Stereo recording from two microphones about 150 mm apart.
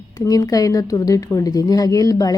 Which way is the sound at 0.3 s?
25° left (ahead or behind).